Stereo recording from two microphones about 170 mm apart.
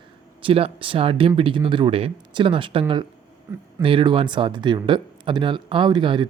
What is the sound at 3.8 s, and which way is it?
Speech, 30° right (ahead or behind).